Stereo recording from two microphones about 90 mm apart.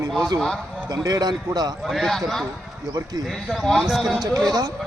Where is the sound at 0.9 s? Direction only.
45° right (ahead or behind).